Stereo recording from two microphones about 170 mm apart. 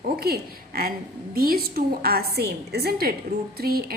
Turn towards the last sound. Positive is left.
turn(degrees=-65)  # may be behind; listen again after turning